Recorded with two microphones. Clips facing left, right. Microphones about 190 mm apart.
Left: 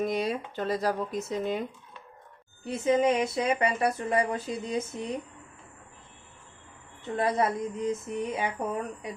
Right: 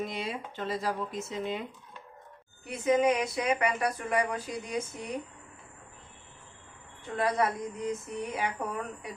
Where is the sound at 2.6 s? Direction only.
25° left (ahead or behind).